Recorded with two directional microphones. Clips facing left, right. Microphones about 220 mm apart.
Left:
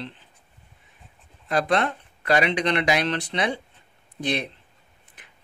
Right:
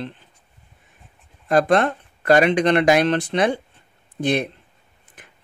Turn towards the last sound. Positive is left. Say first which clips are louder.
# right 5 dB
turn(degrees=-50)  # may be behind; listen again after turning